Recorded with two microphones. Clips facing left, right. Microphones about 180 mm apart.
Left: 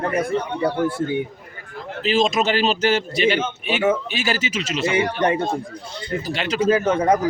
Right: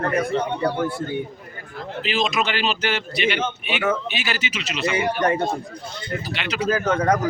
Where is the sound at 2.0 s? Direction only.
45° left (ahead or behind).